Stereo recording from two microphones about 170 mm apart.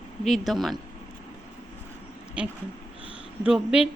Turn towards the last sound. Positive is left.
turn(degrees=-5)  # may be behind; listen again after turning